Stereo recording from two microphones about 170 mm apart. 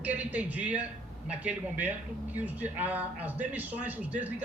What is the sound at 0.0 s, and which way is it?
Speech, 10° right (ahead or behind).